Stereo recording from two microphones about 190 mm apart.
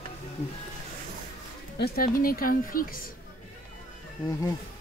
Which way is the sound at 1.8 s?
50° left (ahead or behind).